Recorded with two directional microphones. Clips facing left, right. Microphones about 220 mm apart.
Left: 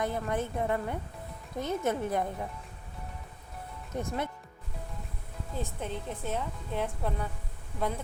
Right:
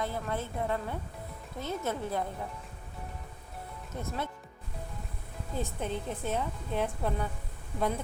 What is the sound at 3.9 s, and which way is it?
Speech, 15° left (ahead or behind).